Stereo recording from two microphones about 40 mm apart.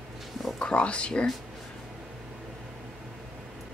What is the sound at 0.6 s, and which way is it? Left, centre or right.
Speech, left.